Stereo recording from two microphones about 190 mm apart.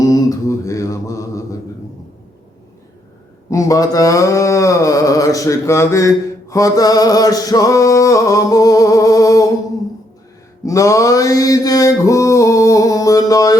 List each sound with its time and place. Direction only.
0.0 s mantra: 20° left (ahead or behind)
3.5 s mantra: 15° left (ahead or behind)
10.6 s mantra: 15° left (ahead or behind)